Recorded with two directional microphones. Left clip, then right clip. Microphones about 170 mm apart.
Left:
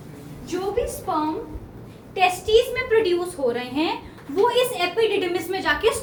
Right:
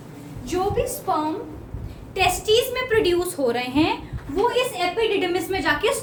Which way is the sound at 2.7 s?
90° right.